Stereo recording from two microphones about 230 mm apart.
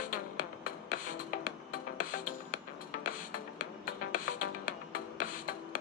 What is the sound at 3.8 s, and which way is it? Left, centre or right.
Music, left.